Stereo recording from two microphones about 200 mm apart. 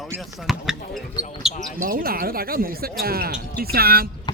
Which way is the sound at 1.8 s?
45° right (ahead or behind).